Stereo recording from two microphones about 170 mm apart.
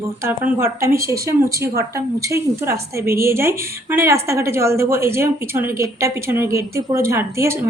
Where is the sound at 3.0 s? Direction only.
60° right (ahead or behind).